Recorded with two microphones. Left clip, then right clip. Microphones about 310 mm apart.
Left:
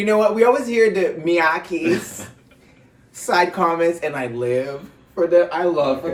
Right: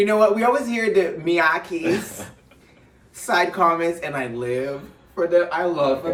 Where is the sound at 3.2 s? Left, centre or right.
Centre.